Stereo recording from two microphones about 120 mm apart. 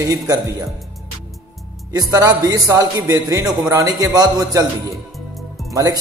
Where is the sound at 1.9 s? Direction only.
30° right (ahead or behind).